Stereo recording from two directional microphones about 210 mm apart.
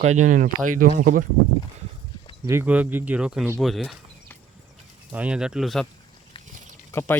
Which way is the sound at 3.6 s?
Centre (ahead or behind).